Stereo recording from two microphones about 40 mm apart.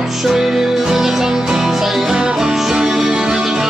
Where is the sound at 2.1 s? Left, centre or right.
Centre.